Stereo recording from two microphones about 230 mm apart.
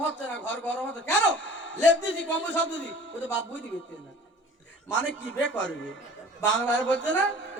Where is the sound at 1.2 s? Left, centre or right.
Left.